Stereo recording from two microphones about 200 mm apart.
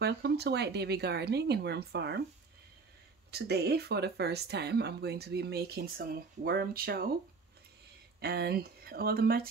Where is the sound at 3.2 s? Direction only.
55° right (ahead or behind).